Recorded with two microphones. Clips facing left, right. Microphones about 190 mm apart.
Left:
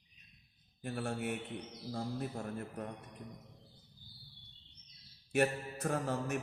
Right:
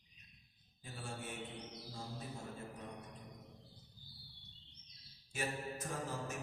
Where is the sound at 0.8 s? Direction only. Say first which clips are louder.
Left 10 dB; 65° left (ahead or behind).